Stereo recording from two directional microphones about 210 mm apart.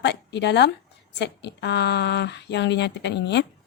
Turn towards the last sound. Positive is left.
turn(degrees=55)  # may be behind; listen again after turning